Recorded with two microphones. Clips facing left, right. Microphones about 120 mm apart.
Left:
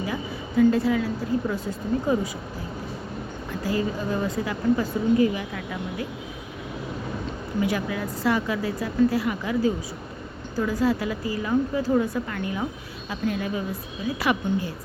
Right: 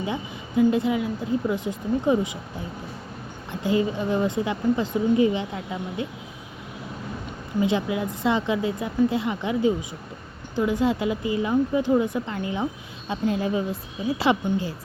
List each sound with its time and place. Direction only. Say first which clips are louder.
0.0 s a woman's voice: even; 20° right (ahead or behind)
3.5 s a woman's voice: right 3 dB; 25° right (ahead or behind)
7.6 s a woman's voice: right 3 dB; 20° right (ahead or behind)